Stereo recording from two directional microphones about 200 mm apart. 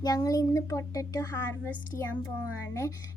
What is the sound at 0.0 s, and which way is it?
Speech, 20° left (ahead or behind).